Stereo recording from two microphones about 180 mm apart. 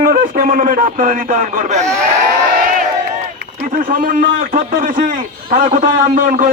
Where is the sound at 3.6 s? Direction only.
50° right (ahead or behind).